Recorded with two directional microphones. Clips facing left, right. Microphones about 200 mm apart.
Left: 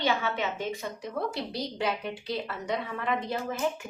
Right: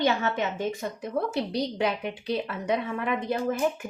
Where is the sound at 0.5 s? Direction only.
55° right (ahead or behind).